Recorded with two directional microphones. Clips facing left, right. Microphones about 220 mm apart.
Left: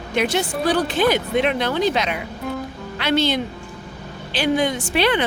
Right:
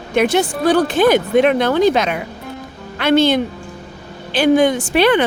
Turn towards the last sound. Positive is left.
turn(degrees=-50)  # may be behind; listen again after turning